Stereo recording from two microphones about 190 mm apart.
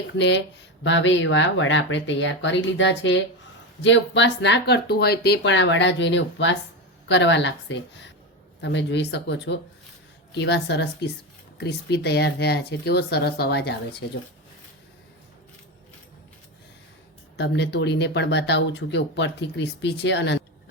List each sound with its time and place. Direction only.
0.2 s speech: 65° left (ahead or behind)
17.3 s speech: 65° left (ahead or behind)